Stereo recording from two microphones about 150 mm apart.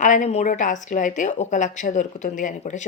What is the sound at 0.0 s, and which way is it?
A woman's voice, 55° left (ahead or behind).